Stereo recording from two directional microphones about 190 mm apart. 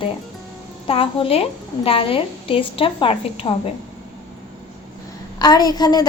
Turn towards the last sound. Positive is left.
turn(degrees=20)  # may be behind; listen again after turning